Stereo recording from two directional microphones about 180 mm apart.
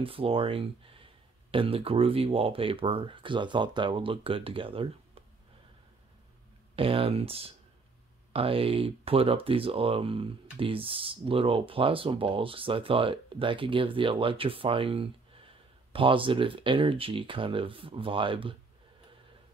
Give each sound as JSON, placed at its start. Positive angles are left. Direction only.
{"t": 0.0, "sound": "speech", "side_deg": -30}
{"t": 6.7, "sound": "speech", "side_deg": -30}